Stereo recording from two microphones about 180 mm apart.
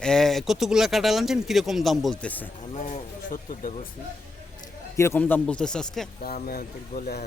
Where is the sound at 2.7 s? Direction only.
45° left (ahead or behind).